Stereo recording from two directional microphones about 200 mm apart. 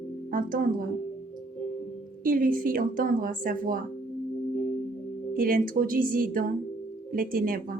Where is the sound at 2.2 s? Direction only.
45° right (ahead or behind).